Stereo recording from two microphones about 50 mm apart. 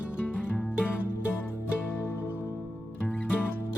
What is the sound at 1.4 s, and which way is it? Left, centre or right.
Music, left.